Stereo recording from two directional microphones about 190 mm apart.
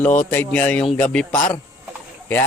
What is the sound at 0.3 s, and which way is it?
A man's voice, 10° left (ahead or behind).